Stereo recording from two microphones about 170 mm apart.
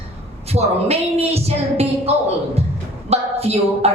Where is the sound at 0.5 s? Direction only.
35° right (ahead or behind).